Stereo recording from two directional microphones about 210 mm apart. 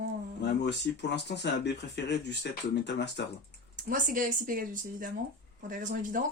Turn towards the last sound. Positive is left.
turn(degrees=-40)  # may be behind; listen again after turning